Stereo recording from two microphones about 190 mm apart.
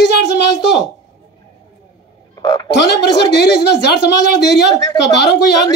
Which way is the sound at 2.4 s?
20° left (ahead or behind).